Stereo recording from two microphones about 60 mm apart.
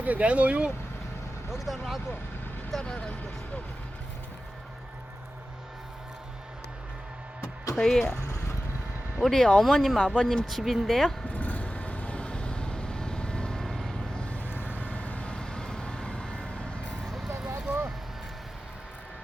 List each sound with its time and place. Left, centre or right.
0.0 s speech: right
1.5 s speech: centre
2.8 s speech: centre
7.8 s speech: centre
9.2 s speech: centre
10.6 s speech: centre
10.8 s speech: centre
11.3 s vehicle: left; by 14.1 s centre
14.2 s vehicle: left
17.2 s a sound: centre
17.5 s a sound: right